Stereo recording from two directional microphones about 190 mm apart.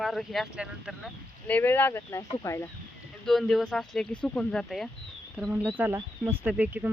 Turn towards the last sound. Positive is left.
turn(degrees=-5)  # may be behind; listen again after turning